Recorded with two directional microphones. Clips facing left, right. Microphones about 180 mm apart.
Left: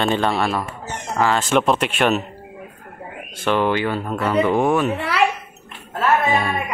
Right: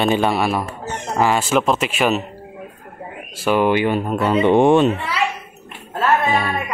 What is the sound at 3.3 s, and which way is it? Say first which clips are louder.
Speech: right 3 dB; 10° right (ahead or behind).